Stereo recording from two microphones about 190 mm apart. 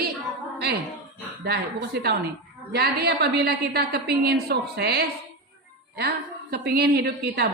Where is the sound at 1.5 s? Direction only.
60° right (ahead or behind).